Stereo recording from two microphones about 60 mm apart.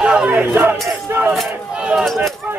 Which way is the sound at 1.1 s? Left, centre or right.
Right.